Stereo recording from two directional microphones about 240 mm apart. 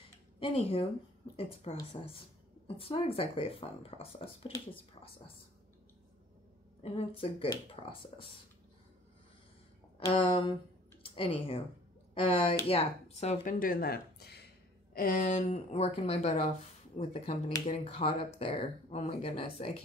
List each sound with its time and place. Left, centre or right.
0.4 s speech: left
6.8 s speech: left
9.9 s speech: left